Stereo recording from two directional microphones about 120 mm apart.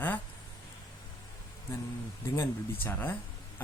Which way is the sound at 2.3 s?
20° left (ahead or behind).